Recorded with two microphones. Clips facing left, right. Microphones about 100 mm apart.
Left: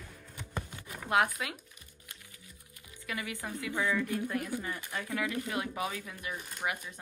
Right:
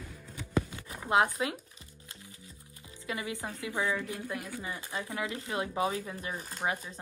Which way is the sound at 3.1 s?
20° right (ahead or behind).